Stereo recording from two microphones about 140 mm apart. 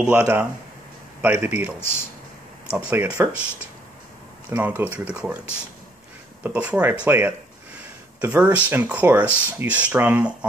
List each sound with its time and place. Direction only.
0.0 s speech: 10° right (ahead or behind)
1.8 s speech: 15° left (ahead or behind)
2.7 s speech: 10° right (ahead or behind)
4.5 s speech: 10° right (ahead or behind)